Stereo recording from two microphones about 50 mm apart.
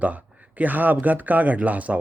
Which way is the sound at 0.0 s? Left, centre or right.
Right.